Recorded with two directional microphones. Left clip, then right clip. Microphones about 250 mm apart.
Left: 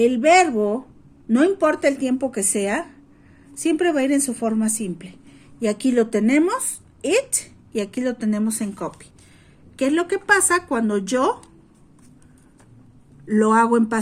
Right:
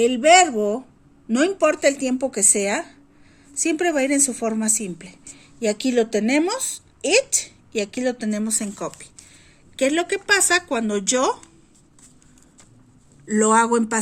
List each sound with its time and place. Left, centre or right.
0.0 s a woman's voice: centre
13.2 s speech: centre